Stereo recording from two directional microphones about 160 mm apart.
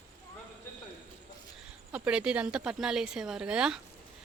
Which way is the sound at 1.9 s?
5° right (ahead or behind).